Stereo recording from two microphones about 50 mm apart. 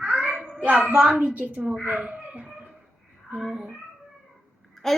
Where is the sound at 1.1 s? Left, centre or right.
Right.